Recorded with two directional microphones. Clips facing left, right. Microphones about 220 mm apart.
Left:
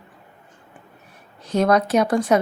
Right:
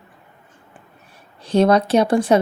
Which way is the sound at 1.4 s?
30° right (ahead or behind).